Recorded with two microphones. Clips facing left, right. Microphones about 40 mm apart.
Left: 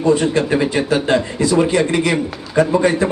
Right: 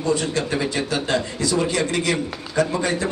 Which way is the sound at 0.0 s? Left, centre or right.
Left.